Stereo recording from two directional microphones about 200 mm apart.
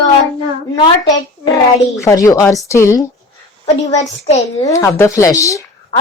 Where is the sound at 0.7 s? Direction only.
20° left (ahead or behind).